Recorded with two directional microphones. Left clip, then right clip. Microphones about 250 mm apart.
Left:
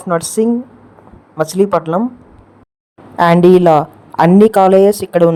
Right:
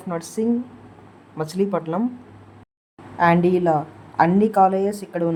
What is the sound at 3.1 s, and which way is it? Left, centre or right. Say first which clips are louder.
Speech: left 9 dB; left.